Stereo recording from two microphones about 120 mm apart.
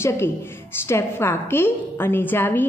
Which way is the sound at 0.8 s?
20° left (ahead or behind).